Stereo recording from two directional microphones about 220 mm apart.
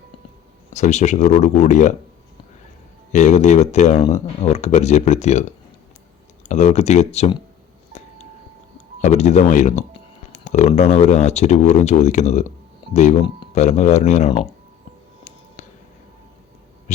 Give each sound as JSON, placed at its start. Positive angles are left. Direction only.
{"t": 0.7, "sound": "speech", "side_deg": 30}
{"t": 3.1, "sound": "speech", "side_deg": 35}
{"t": 9.0, "sound": "speech", "side_deg": 30}